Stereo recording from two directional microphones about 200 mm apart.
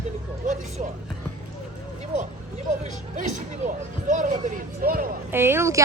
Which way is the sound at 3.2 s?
40° right (ahead or behind).